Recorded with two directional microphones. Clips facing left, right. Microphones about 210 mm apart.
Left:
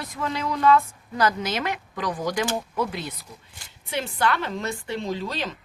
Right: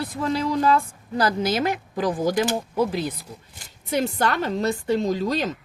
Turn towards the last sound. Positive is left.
turn(degrees=-40)  # may be behind; listen again after turning